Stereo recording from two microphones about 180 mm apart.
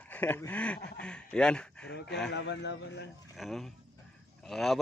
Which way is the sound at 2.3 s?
75° left (ahead or behind).